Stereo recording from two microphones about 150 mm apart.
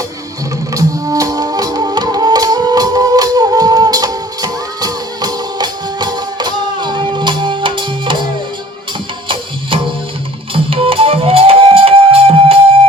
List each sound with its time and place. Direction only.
0.7 s music: 25° right (ahead or behind)
9.3 s tabla: 35° right (ahead or behind)
10.5 s music: 40° right (ahead or behind)